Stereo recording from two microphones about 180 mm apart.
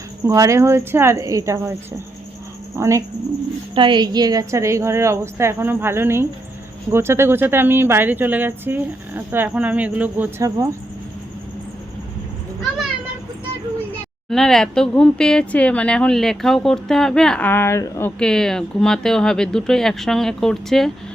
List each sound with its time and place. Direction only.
0.3 s speech: 15° right (ahead or behind)
2.7 s speech: 15° right (ahead or behind)
3.8 s speech: 25° right (ahead or behind)
14.3 s speech: centre (ahead or behind)
18.2 s speech: 5° left (ahead or behind)